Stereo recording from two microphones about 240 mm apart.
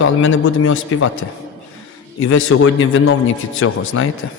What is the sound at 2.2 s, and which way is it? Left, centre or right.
Speech, left.